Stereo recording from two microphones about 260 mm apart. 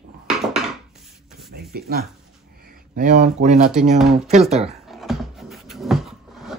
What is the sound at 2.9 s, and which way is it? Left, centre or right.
Speech, right.